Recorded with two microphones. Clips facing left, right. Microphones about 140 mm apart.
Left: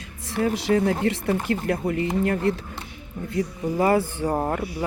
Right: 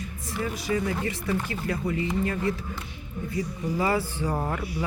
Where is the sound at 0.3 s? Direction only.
65° left (ahead or behind); by 4.3 s 50° left (ahead or behind).